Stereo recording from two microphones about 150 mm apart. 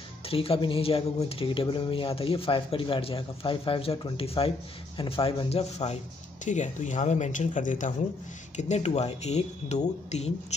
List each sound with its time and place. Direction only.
0.3 s speech: 40° left (ahead or behind)
6.4 s speech: 55° left (ahead or behind)